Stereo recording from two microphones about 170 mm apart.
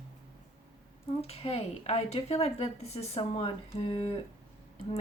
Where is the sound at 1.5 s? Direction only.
35° left (ahead or behind).